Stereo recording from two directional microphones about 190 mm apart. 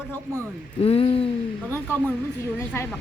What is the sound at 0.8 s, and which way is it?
Speech, 30° left (ahead or behind).